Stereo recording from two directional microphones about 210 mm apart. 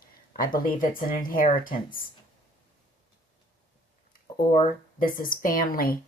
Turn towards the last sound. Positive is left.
turn(degrees=45)  # may be behind; listen again after turning